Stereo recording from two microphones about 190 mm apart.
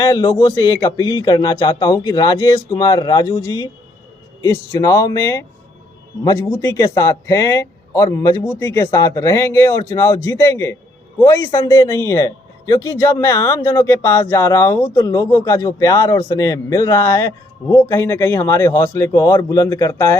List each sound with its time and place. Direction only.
0.0 s a man's voice: 20° left (ahead or behind)